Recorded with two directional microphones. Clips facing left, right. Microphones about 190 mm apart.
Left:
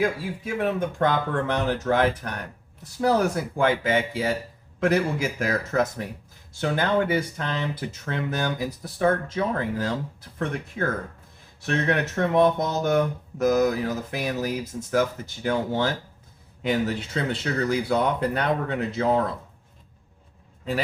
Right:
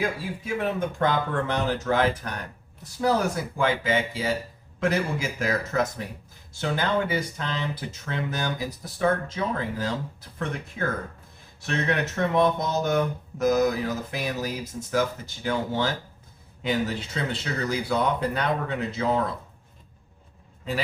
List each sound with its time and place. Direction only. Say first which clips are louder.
0.4 s speech: left 2 dB; 55° left (ahead or behind)